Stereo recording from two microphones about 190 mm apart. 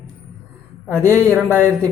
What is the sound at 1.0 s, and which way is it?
Speech, 15° right (ahead or behind).